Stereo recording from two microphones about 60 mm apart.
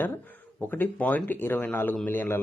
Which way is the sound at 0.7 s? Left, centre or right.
Left.